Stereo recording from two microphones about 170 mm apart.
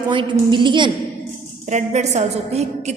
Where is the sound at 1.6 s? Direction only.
45° right (ahead or behind).